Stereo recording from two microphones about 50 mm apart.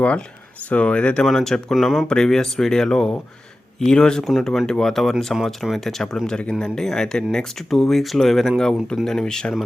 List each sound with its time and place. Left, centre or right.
0.7 s speech: left
1.2 s speech: centre
2.0 s speech: centre
4.3 s speech: centre
5.3 s speech: centre